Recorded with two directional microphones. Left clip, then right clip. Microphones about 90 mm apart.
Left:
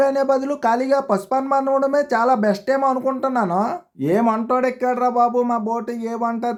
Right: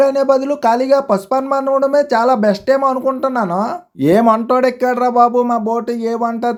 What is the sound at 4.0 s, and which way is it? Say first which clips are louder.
Speech: right 8 dB; 45° right (ahead or behind).